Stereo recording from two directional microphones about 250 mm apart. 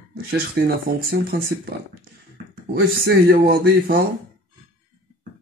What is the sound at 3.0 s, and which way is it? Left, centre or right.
Speech, right.